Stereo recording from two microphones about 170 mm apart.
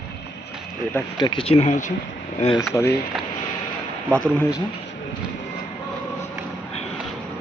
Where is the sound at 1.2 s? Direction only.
30° left (ahead or behind).